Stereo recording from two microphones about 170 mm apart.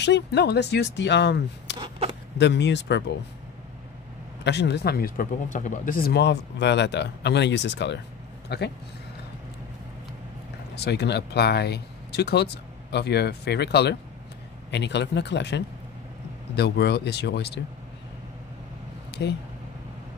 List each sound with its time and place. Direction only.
0.0 s speech: 85° left
4.5 s speech: 85° left
8.5 s speech: 80° left
10.8 s speech: 80° left
14.7 s speech: 90° left
16.5 s speech: 80° left
19.2 s speech: 90° left